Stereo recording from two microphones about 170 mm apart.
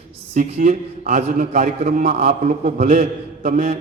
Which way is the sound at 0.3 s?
45° right (ahead or behind).